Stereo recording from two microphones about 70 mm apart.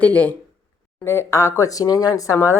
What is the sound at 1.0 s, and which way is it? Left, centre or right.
Speech, left.